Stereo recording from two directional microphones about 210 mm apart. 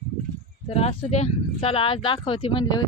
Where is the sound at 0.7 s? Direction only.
30° left (ahead or behind).